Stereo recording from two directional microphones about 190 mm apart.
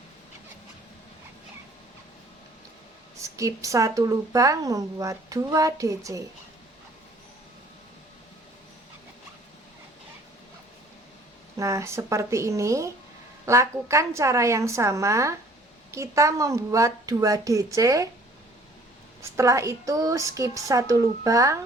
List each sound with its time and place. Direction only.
3.2 s a woman's voice: 15° right (ahead or behind)
11.5 s a woman's voice: 15° right (ahead or behind)
19.4 s a woman's voice: 15° right (ahead or behind)